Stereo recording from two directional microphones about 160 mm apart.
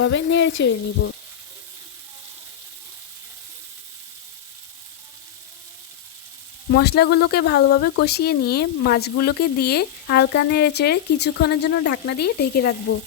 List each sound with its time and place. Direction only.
0.1 s speech: 90° left
6.7 s speech: 90° left